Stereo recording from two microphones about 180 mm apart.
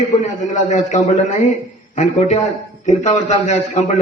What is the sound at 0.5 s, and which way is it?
A man's voice, 45° left (ahead or behind).